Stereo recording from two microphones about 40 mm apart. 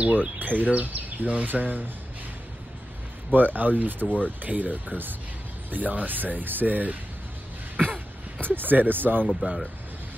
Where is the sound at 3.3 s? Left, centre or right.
Right.